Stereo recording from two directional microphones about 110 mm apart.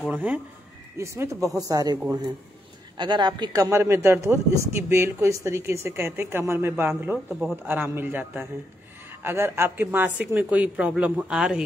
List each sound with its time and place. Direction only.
0.1 s speech: 15° right (ahead or behind)
0.9 s a man's voice: 25° right (ahead or behind)
3.0 s a man's voice: 45° right (ahead or behind); by 11.6 s 10° right (ahead or behind)